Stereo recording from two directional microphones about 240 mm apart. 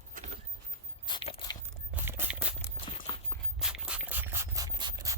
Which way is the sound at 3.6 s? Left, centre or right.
Centre.